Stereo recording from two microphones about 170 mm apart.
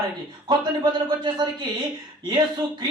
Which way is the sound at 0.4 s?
25° right (ahead or behind).